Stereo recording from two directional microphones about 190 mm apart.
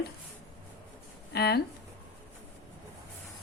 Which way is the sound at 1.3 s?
55° left (ahead or behind).